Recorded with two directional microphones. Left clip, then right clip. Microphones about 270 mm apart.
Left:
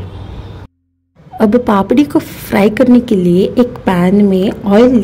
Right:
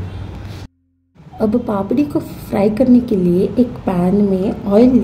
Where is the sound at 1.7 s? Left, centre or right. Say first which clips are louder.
Left 7 dB; left.